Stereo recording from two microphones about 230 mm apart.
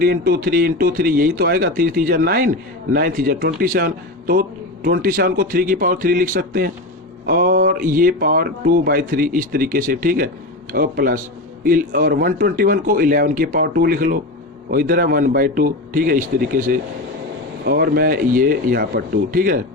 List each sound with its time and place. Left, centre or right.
0.0 s a man's voice: right